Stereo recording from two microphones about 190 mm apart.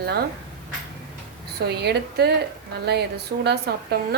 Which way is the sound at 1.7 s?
60° right (ahead or behind).